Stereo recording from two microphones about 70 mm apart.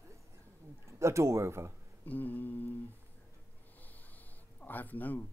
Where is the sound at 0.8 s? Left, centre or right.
Right.